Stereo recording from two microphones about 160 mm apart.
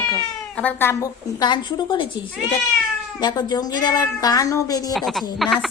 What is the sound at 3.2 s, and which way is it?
A woman's voice, 25° left (ahead or behind).